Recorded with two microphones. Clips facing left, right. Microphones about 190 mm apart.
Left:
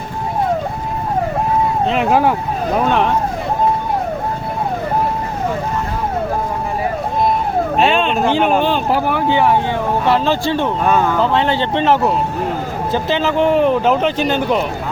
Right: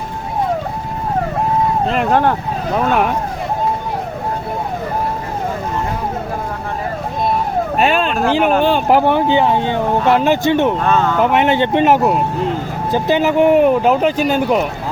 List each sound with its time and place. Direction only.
1.9 s speech: 5° left (ahead or behind)
7.8 s a sound: 5° right (ahead or behind)
8.3 s speech: 5° right (ahead or behind)
8.9 s speech: 20° right (ahead or behind)
10.8 s speech: 10° left (ahead or behind)
11.2 s speech: 15° right (ahead or behind)